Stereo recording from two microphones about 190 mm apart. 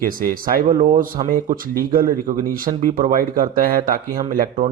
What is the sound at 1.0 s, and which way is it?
Speech, 45° right (ahead or behind).